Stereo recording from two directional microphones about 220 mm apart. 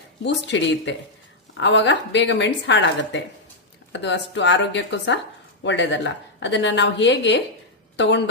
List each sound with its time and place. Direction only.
0.3 s a woman's voice: 55° left (ahead or behind)